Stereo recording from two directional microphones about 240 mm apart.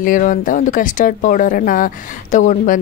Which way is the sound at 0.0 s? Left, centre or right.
Left.